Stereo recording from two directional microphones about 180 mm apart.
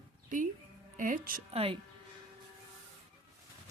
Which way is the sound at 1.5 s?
30° right (ahead or behind).